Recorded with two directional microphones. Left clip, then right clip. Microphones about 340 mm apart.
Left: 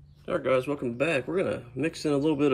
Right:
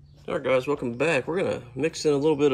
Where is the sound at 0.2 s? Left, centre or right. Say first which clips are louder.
Right 2 dB; centre.